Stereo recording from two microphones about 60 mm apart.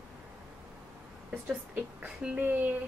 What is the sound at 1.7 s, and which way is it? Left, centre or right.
Speech, right.